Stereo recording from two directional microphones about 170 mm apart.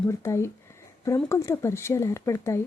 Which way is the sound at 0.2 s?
15° left (ahead or behind).